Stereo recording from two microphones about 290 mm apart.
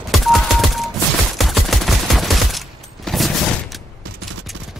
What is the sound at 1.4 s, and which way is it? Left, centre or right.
Fusillade, centre.